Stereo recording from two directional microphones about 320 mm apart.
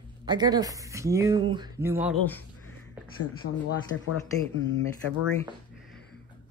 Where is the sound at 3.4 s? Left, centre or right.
Left.